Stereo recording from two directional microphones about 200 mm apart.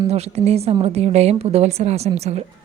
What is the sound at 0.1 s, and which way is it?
A woman's voice, 30° right (ahead or behind).